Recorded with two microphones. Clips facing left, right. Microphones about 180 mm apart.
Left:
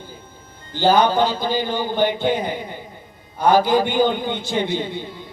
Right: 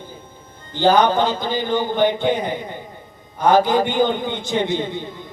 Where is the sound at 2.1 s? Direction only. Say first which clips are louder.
Right 1 dB; 20° right (ahead or behind).